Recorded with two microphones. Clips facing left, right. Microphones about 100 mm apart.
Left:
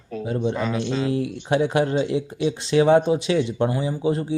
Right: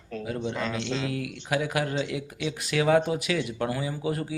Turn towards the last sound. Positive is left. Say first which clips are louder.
# left 6 dB
turn(degrees=25)  # may be behind; listen again after turning